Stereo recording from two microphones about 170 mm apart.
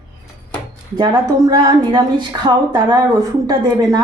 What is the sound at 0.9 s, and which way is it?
A woman's voice, 25° right (ahead or behind).